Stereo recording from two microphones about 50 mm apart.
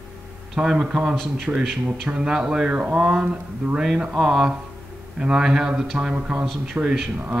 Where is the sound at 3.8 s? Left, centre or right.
Centre.